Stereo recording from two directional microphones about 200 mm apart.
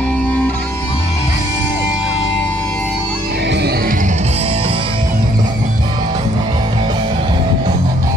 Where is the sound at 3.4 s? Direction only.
55° right (ahead or behind).